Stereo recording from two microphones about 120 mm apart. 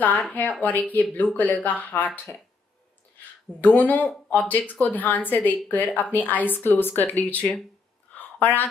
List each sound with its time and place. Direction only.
0.0 s speech: 15° left (ahead or behind)
3.6 s speech: 15° left (ahead or behind)
8.1 s a sound: 15° left (ahead or behind)